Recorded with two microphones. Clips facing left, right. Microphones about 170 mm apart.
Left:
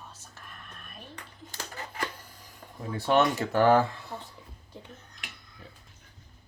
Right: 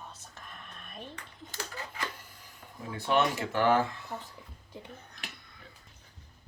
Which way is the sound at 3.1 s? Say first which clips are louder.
Left 4 dB; 40° left (ahead or behind).